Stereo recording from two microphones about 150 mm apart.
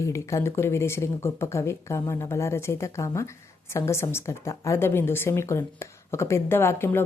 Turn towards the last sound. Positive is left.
turn(degrees=15)  # may be behind; listen again after turning